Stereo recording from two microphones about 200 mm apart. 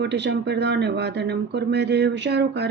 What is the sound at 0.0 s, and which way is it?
Speech, 60° right (ahead or behind).